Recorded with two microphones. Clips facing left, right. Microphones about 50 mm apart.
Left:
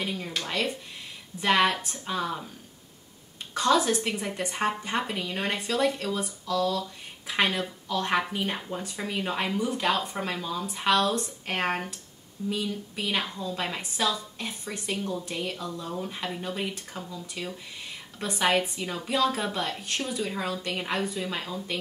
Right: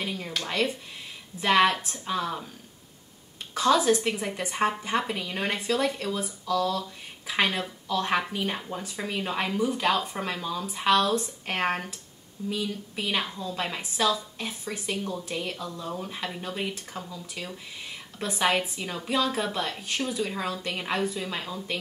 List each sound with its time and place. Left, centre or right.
0.0 s speech: centre
3.5 s speech: centre